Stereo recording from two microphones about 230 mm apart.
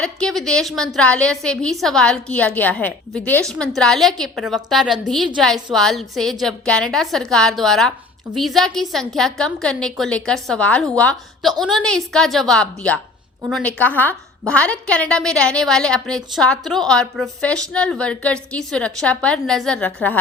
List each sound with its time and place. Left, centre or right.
0.0 s a woman's voice: centre